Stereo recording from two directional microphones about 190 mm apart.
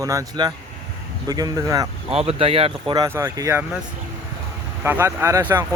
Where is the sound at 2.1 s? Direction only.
30° right (ahead or behind).